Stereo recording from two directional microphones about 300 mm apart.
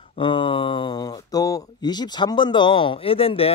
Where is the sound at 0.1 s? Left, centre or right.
Centre.